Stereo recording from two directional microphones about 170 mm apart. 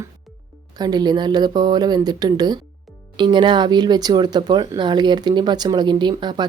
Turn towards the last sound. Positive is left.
turn(degrees=-25)  # may be behind; listen again after turning